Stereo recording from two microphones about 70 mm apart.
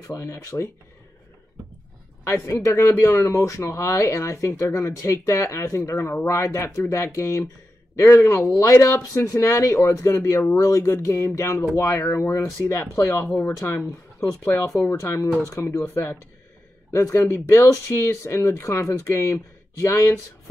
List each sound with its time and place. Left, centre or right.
0.1 s speech: left
2.2 s speech: left